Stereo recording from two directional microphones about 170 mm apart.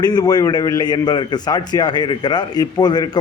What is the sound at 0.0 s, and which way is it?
A man's voice, 25° left (ahead or behind).